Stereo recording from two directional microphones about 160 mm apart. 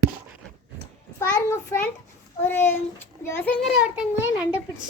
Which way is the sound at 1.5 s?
15° left (ahead or behind).